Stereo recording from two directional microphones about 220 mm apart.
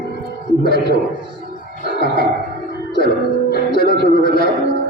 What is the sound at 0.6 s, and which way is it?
Speech, 45° left (ahead or behind).